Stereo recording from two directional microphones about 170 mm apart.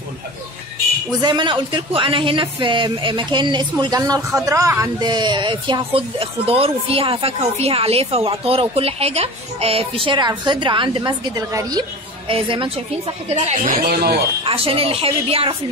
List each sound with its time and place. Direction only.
1.2 s speech: 25° right (ahead or behind)
13.8 s speech: 65° right (ahead or behind)
14.4 s speech: 35° right (ahead or behind)